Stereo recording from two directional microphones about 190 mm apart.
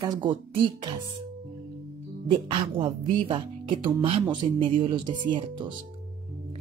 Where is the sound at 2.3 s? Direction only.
25° right (ahead or behind).